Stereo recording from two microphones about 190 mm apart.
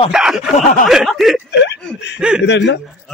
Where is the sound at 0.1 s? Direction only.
5° right (ahead or behind).